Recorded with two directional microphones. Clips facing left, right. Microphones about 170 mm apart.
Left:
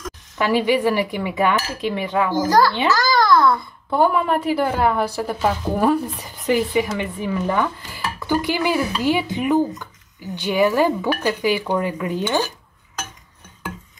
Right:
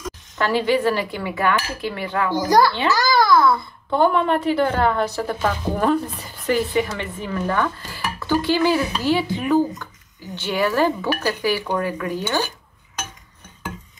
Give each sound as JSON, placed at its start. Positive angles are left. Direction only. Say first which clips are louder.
{"t": 0.4, "sound": "stir", "louder": "left 1 dB", "side_deg": 15}
{"t": 2.3, "sound": "a child's voice", "louder": "right 1 dB", "side_deg": -15}
{"t": 2.9, "sound": "babbling", "louder": "even", "side_deg": -10}
{"t": 3.9, "sound": "stir", "louder": "even", "side_deg": 5}